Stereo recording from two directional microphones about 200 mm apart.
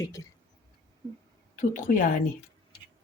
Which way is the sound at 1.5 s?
40° left (ahead or behind).